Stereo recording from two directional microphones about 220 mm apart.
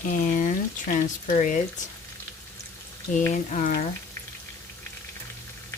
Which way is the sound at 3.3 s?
35° left (ahead or behind).